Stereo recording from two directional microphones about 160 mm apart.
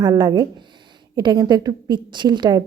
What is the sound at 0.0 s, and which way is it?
A woman's voice, 25° right (ahead or behind).